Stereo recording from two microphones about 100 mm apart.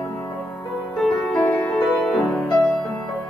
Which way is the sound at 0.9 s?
Centre (ahead or behind).